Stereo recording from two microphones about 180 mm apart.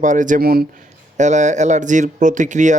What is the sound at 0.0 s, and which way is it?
Speech, 45° right (ahead or behind).